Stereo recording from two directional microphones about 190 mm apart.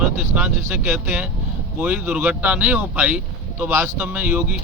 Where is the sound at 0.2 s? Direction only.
5° right (ahead or behind).